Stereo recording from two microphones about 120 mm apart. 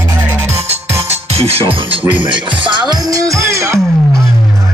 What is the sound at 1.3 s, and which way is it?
Music, 55° right (ahead or behind).